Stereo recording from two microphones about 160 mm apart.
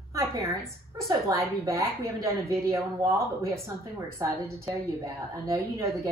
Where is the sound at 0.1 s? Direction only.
20° right (ahead or behind).